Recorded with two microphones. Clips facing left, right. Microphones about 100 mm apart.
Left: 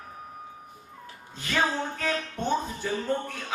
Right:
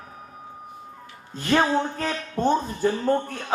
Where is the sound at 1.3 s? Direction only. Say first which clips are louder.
Right 6 dB; 40° right (ahead or behind).